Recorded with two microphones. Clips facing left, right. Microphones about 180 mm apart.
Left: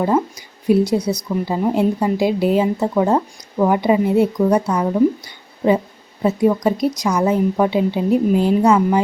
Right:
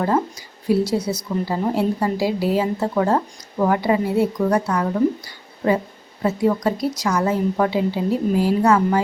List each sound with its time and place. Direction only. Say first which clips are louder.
0.0 s a woman's voice: left 3 dB; 15° left (ahead or behind)
6.2 s a woman's voice: left 3 dB; 20° left (ahead or behind)